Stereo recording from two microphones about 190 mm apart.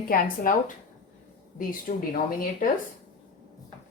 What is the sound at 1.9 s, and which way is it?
Speech, 40° left (ahead or behind).